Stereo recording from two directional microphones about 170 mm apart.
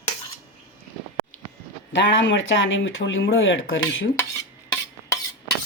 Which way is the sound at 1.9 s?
90° left.